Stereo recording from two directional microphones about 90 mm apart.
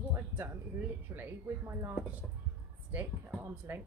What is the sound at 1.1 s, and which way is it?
A woman's voice, 25° right (ahead or behind).